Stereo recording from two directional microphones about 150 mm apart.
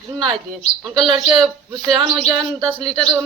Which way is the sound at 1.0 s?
35° right (ahead or behind).